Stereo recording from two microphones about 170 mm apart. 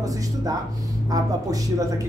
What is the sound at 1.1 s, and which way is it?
Speech, 20° right (ahead or behind).